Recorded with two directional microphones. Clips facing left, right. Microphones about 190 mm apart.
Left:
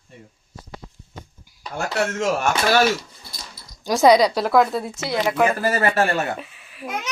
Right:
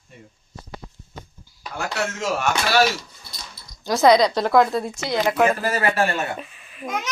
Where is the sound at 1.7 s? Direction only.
45° left (ahead or behind).